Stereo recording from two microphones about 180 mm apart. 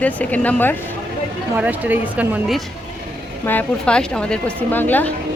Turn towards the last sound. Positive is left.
turn(degrees=10)  # may be behind; listen again after turning